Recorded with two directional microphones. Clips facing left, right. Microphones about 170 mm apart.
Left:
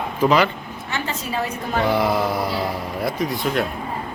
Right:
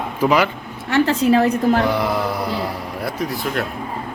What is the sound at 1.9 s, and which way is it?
Speech, centre (ahead or behind).